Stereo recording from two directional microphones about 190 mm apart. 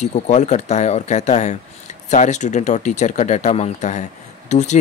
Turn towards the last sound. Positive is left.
turn(degrees=40)  # may be behind; listen again after turning